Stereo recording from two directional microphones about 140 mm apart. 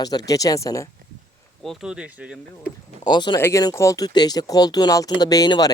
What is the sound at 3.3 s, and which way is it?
Speech, 20° left (ahead or behind).